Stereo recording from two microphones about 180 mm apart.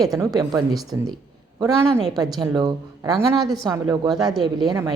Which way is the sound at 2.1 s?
20° right (ahead or behind).